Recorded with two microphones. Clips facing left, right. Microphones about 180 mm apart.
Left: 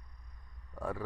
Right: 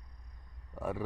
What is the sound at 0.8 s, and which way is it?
Speech, 20° right (ahead or behind).